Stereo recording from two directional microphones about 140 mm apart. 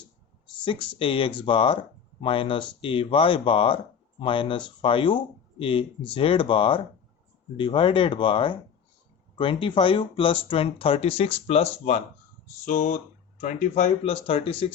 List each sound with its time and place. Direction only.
0.5 s speech: 35° left (ahead or behind)